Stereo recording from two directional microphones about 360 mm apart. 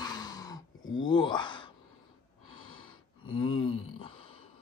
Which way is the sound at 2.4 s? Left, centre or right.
Left.